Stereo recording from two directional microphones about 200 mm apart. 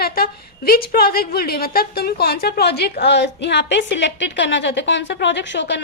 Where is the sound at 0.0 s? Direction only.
50° left (ahead or behind).